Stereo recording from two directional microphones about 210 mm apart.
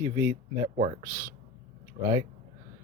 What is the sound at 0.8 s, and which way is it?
Speech, 30° right (ahead or behind).